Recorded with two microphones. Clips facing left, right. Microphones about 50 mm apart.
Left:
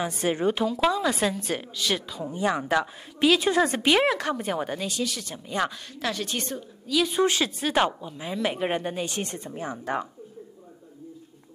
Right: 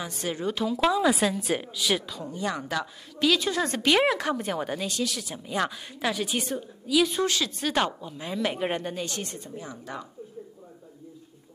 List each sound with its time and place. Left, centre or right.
0.0 s a woman's voice: left
0.7 s speech: centre
2.3 s a woman's voice: centre
3.6 s a woman's voice: centre
4.0 s a woman's voice: centre
7.2 s a woman's voice: left
7.6 s a woman's voice: centre
9.2 s speech: left